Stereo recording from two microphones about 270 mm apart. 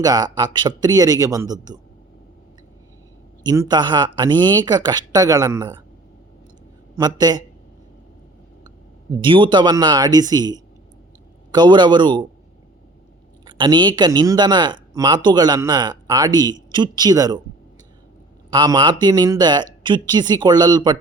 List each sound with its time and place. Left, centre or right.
0.0 s speech: centre
3.4 s speech: centre
6.9 s speech: centre
8.6 s speech: centre
13.4 s speech: centre
18.5 s speech: centre